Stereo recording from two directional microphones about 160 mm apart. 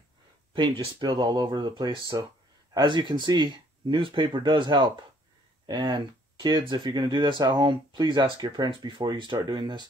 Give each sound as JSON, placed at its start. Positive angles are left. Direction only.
{"t": 0.6, "sound": "speech", "side_deg": -30}